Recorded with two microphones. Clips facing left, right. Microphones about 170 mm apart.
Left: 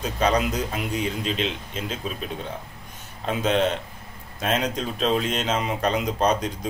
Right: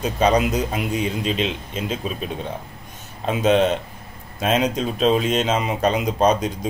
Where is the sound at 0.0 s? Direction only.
20° right (ahead or behind).